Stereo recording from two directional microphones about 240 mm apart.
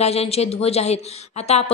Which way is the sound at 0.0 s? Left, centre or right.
Left.